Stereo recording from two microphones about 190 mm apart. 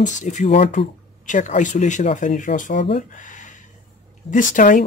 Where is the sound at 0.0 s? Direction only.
40° left (ahead or behind).